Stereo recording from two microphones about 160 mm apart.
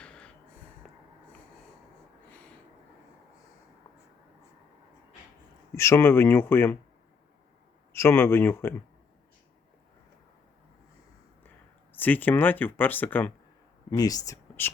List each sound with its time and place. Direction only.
0.0 s snort: 5° left (ahead or behind)
5.7 s speech: 15° left (ahead or behind)
7.9 s speech: 15° left (ahead or behind)
11.9 s speech: 10° left (ahead or behind)
13.9 s speech: 25° left (ahead or behind)